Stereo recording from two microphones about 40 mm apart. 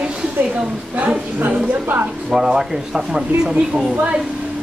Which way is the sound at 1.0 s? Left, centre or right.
Right.